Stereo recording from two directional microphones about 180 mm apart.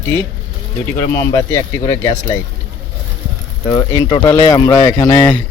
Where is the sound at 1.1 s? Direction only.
15° left (ahead or behind).